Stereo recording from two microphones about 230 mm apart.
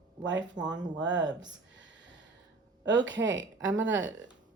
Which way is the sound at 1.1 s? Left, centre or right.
Centre.